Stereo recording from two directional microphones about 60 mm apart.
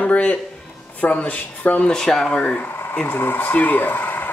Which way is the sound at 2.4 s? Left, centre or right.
Left.